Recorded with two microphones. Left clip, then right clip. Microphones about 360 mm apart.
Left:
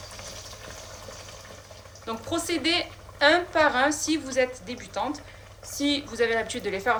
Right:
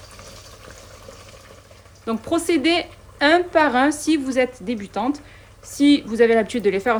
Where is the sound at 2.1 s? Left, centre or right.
Centre.